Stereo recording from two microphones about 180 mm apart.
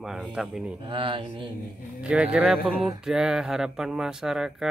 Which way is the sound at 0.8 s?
30° right (ahead or behind).